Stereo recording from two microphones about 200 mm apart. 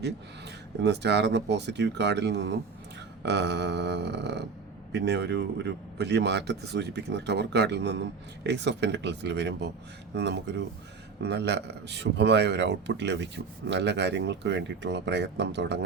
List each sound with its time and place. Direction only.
0.0 s speech: 55° right (ahead or behind)